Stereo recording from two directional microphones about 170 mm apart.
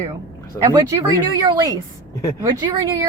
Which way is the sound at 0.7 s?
25° right (ahead or behind).